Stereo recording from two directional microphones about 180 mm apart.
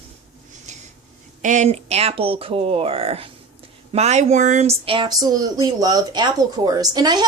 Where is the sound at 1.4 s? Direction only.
45° right (ahead or behind).